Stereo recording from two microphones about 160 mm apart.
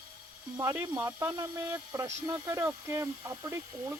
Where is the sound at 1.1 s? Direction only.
10° right (ahead or behind).